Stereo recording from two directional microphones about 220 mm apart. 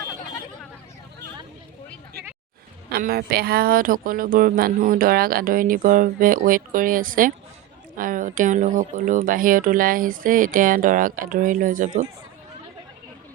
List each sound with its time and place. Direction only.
2.9 s a woman's voice: 40° right (ahead or behind)